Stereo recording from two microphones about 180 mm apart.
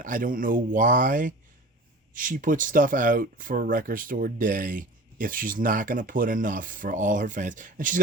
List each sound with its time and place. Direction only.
0.0 s speech: 50° right (ahead or behind)